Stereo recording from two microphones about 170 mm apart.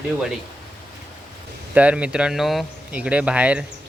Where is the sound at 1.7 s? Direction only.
5° right (ahead or behind).